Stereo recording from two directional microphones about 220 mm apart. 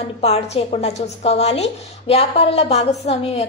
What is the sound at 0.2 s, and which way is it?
A woman's voice, 30° left (ahead or behind).